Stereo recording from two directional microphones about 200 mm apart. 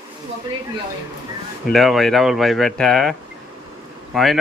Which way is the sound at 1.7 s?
Centre (ahead or behind).